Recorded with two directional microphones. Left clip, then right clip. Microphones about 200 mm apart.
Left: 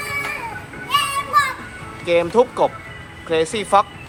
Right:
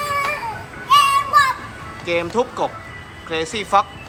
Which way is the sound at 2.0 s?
5° right (ahead or behind).